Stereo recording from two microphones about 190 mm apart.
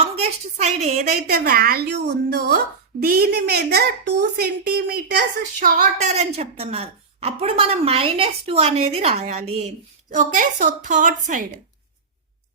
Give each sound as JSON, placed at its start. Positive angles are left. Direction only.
{"t": 0.0, "sound": "a woman's voice", "side_deg": -35}
{"t": 1.3, "sound": "a woman's voice", "side_deg": -55}
{"t": 3.0, "sound": "a woman's voice", "side_deg": -50}
{"t": 6.1, "sound": "a woman's voice", "side_deg": -35}